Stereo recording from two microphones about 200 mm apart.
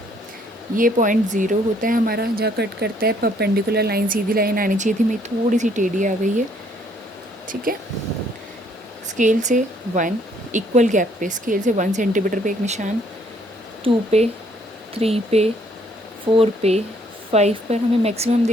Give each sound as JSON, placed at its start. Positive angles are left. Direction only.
{"t": 0.8, "sound": "speech", "side_deg": -40}
{"t": 7.4, "sound": "speech", "side_deg": -45}
{"t": 9.1, "sound": "speech", "side_deg": -40}